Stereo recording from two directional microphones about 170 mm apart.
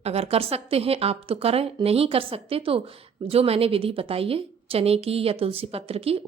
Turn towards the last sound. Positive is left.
turn(degrees=-35)  # may be behind; listen again after turning